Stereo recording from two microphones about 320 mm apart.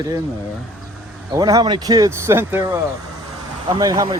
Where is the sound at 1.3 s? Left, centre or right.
Centre.